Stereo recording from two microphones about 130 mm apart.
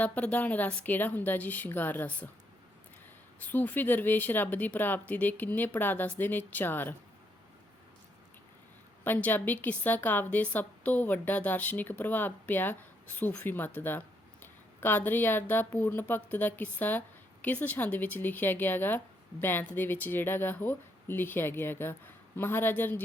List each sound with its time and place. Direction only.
0.0 s speech: 10° left (ahead or behind)
3.4 s speech: 15° left (ahead or behind)
9.0 s speech: 15° left (ahead or behind)